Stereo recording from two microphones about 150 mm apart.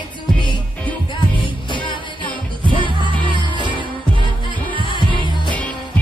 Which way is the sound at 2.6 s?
35° right (ahead or behind).